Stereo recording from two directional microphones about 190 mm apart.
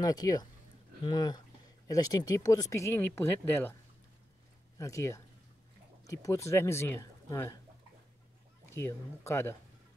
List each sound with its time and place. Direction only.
0.0 s speech: 20° left (ahead or behind)
4.7 s speech: 15° left (ahead or behind)
8.6 s speech: 15° left (ahead or behind)